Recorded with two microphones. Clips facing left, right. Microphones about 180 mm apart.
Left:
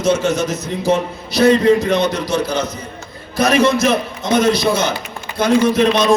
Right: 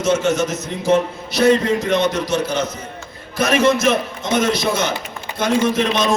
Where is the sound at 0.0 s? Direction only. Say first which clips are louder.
Left 1 dB; 35° left (ahead or behind).